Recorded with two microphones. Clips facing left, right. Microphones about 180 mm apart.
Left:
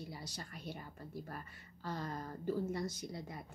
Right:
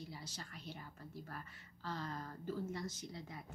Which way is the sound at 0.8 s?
35° left (ahead or behind).